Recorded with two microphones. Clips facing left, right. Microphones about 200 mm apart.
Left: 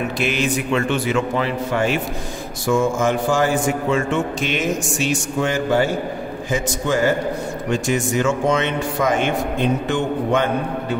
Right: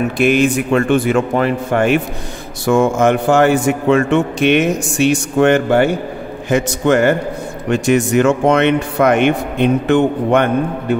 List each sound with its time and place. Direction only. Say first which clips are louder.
0.2 s a man's voice: right 10 dB; 50° right (ahead or behind)
2.6 s a man's voice: right 6 dB; 65° right (ahead or behind)